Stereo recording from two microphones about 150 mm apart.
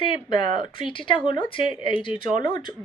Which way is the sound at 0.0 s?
35° left (ahead or behind).